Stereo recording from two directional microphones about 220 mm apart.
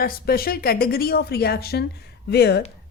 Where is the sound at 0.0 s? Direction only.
40° left (ahead or behind).